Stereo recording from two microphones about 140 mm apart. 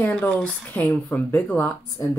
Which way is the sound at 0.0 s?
10° left (ahead or behind).